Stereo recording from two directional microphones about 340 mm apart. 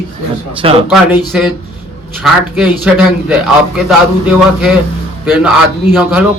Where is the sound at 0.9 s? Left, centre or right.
Centre.